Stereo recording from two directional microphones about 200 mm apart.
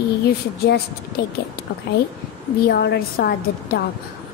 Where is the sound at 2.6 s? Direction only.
50° left (ahead or behind).